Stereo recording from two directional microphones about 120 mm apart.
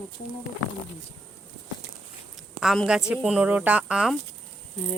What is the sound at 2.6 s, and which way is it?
Speech, centre (ahead or behind).